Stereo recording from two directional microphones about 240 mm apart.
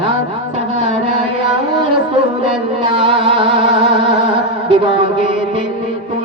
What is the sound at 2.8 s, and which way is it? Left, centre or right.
Music, right.